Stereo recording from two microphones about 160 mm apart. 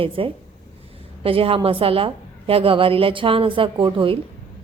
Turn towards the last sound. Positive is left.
turn(degrees=-30)  # may be behind; listen again after turning